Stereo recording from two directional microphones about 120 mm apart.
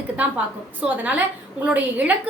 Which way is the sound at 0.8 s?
15° right (ahead or behind).